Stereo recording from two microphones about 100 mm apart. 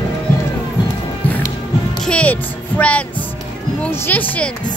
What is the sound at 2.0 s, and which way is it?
Speech, 10° left (ahead or behind).